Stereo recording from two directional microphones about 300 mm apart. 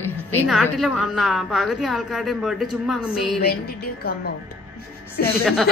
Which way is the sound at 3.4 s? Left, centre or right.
Left.